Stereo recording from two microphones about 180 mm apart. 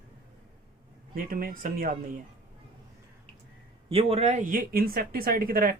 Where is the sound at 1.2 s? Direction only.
50° right (ahead or behind).